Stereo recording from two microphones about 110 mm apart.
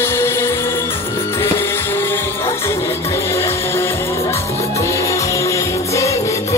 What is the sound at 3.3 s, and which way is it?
Music, 25° left (ahead or behind).